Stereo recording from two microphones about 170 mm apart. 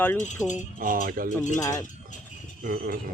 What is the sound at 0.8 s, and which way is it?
Speech, 50° right (ahead or behind).